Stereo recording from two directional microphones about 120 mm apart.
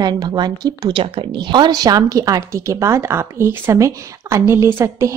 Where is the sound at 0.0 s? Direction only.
35° right (ahead or behind).